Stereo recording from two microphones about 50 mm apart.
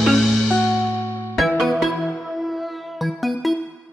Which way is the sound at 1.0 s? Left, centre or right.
Left.